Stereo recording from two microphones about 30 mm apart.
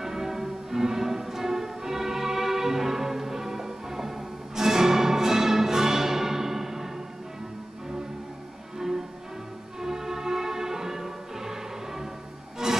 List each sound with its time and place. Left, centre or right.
0.0 s music: centre
8.7 s music: centre